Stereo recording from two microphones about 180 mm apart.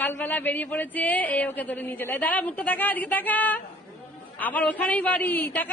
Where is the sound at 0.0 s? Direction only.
10° left (ahead or behind).